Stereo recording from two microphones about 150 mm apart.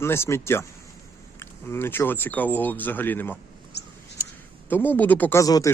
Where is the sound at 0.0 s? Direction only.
15° left (ahead or behind).